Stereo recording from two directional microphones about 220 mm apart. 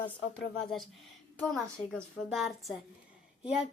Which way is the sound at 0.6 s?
Centre (ahead or behind).